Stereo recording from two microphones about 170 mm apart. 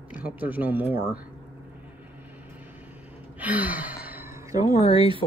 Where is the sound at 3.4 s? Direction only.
10° right (ahead or behind).